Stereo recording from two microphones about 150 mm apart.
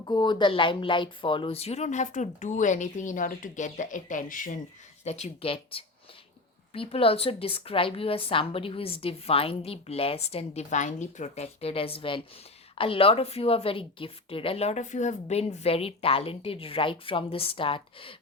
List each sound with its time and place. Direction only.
0.0 s speech: 30° left (ahead or behind); by 4.5 s 60° left (ahead or behind)
5.0 s a woman's voice: 50° left (ahead or behind)